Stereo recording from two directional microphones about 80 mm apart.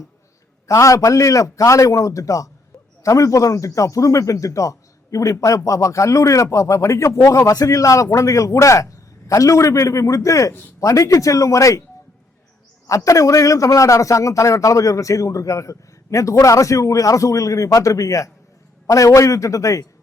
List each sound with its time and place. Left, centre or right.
0.7 s a man's voice: left
13.1 s a man's voice: left